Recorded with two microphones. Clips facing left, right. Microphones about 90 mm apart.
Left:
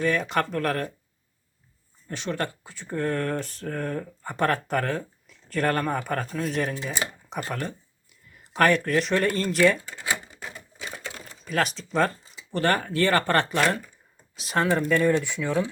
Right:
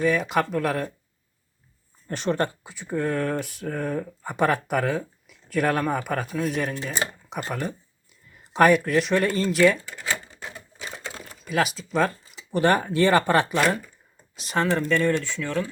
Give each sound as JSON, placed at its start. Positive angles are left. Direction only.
{"t": 0.0, "sound": "speech", "side_deg": -5}
{"t": 2.0, "sound": "speech", "side_deg": -45}
{"t": 2.6, "sound": "speech", "side_deg": -15}
{"t": 2.9, "sound": "speech", "side_deg": -5}
{"t": 8.9, "sound": "speech", "side_deg": 0}
{"t": 9.9, "sound": "speech", "side_deg": 15}
{"t": 11.3, "sound": "speech", "side_deg": -5}
{"t": 12.5, "sound": "speech", "side_deg": -15}